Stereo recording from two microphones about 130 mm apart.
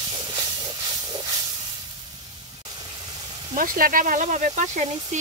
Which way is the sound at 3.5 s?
90° right.